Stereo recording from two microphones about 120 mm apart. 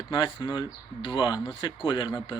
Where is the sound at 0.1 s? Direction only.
40° left (ahead or behind).